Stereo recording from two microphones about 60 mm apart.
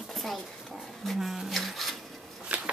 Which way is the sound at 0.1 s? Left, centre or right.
Centre.